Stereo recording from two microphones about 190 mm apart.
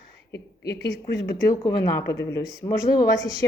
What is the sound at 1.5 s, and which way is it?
A woman's voice, 15° left (ahead or behind).